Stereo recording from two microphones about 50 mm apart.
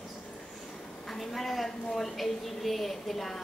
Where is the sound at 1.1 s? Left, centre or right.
Centre.